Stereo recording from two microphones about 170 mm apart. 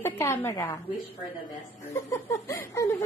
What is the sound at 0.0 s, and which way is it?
Speech, 15° left (ahead or behind).